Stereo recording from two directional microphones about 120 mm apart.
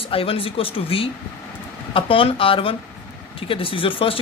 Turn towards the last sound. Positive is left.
turn(degrees=50)  # may be behind; listen again after turning